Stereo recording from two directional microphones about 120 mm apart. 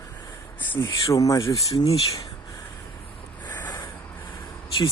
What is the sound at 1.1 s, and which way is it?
Speech, 30° left (ahead or behind).